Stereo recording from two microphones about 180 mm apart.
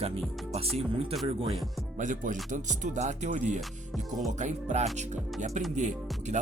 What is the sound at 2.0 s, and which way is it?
Music, 45° right (ahead or behind).